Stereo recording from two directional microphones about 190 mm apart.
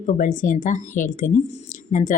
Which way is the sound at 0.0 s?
45° left (ahead or behind).